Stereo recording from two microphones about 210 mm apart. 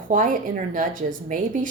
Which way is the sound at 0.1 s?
40° right (ahead or behind).